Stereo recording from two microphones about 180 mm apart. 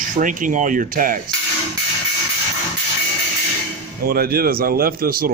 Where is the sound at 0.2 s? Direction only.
45° right (ahead or behind).